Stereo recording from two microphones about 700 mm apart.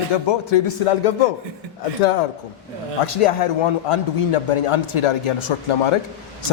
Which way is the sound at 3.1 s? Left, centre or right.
Left.